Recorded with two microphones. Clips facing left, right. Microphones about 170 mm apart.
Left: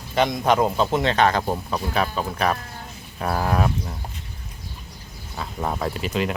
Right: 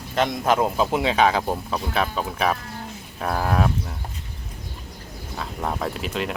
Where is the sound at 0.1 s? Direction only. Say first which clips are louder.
Left 1 dB; centre (ahead or behind).